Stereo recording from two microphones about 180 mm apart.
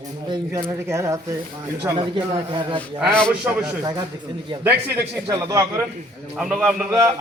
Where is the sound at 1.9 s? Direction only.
25° right (ahead or behind).